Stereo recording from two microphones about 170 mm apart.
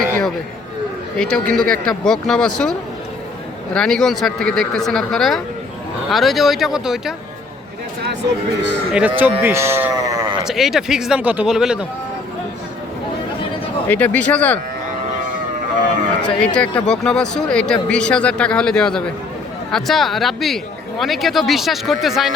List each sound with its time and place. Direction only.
1.2 s speech: 5° left (ahead or behind)
3.8 s speech: 5° left (ahead or behind)
8.9 s speech: 5° right (ahead or behind)
9.4 s sheep: 15° right (ahead or behind)
10.4 s speech: centre (ahead or behind)
13.8 s speech: 10° left (ahead or behind)
16.2 s speech: 5° left (ahead or behind)